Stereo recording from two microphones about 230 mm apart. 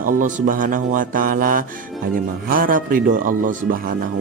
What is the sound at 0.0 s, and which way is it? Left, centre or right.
Speech, right.